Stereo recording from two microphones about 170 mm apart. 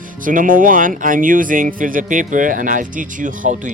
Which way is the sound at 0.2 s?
50° right (ahead or behind).